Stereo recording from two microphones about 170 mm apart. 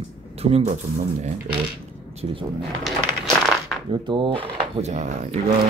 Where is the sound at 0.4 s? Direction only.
35° right (ahead or behind).